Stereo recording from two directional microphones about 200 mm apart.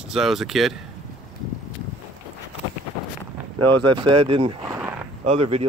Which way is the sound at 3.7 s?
25° right (ahead or behind).